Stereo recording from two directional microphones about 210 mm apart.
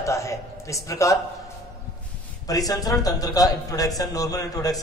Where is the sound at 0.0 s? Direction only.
15° left (ahead or behind).